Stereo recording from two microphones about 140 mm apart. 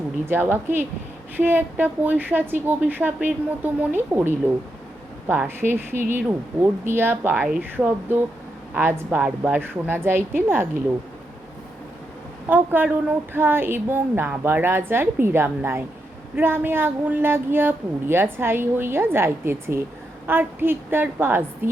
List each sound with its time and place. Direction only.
0.3 s a woman's voice: 15° right (ahead or behind)
12.5 s a woman's voice: 10° right (ahead or behind)